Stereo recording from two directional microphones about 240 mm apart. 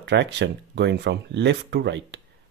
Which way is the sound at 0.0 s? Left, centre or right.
Right.